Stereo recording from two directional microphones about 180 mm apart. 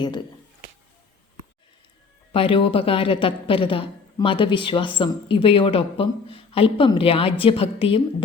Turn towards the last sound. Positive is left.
turn(degrees=30)  # may be behind; listen again after turning